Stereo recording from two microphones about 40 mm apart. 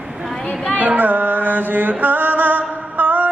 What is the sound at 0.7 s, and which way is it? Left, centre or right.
Music, right.